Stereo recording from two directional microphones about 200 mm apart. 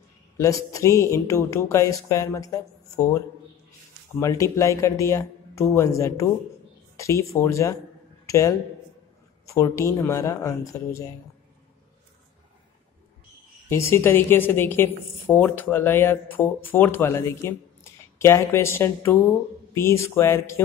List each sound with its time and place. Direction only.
0.4 s a woman's voice: 15° left (ahead or behind)
4.2 s a woman's voice: 15° left (ahead or behind)
13.7 s a woman's voice: 15° left (ahead or behind)